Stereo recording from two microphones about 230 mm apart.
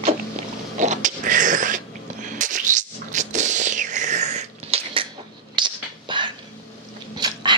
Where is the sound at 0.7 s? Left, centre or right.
Right.